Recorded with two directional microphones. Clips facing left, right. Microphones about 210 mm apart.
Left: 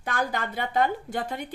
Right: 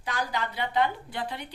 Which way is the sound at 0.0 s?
50° left (ahead or behind).